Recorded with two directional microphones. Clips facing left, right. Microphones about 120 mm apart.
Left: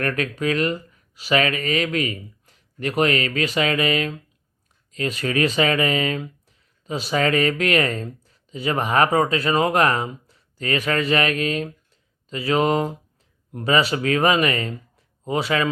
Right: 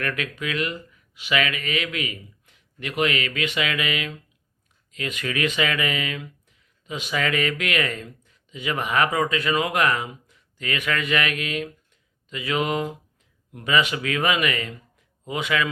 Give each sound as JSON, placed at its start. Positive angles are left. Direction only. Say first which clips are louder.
{"t": 0.0, "sound": "speech", "louder": "left 5 dB", "side_deg": 40}